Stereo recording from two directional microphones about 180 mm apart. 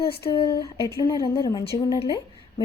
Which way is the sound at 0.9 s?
15° left (ahead or behind).